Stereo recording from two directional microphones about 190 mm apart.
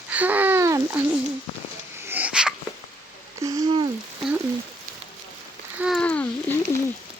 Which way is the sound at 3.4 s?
20° right (ahead or behind).